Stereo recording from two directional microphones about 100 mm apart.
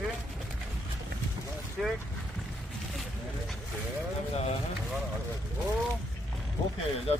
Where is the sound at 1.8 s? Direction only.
5° left (ahead or behind).